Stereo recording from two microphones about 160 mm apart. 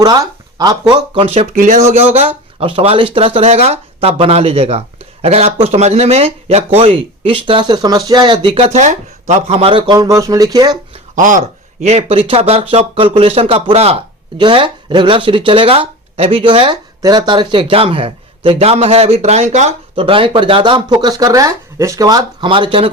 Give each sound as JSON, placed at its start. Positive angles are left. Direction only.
{"t": 0.0, "sound": "speech", "side_deg": -25}
{"t": 2.1, "sound": "speech", "side_deg": -35}
{"t": 8.5, "sound": "speech", "side_deg": -45}
{"t": 11.1, "sound": "speech", "side_deg": -55}